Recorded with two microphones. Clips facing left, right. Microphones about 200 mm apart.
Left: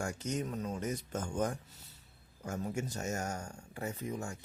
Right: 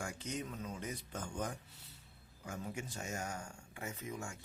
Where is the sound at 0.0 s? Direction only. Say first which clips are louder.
Left 6 dB; 45° left (ahead or behind).